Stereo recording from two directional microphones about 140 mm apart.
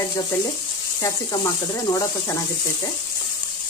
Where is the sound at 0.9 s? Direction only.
25° left (ahead or behind).